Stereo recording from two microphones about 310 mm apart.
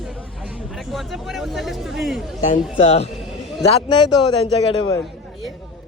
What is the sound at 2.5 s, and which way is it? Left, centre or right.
A man's voice, centre.